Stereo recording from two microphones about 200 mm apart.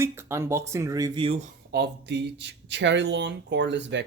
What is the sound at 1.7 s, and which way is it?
Speech, 55° right (ahead or behind).